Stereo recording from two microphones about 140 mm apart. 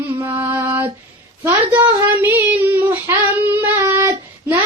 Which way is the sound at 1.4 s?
15° right (ahead or behind).